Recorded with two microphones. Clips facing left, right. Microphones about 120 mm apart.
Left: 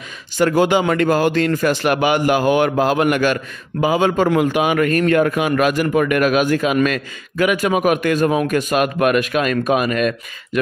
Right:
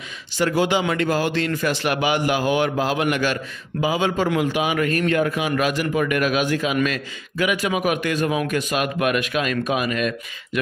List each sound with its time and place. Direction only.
0.4 s a man's voice: 50° left (ahead or behind)